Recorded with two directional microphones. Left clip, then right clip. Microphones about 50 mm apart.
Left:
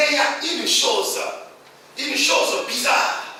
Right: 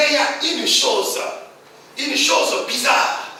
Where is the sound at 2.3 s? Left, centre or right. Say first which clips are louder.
Right 1 dB; right.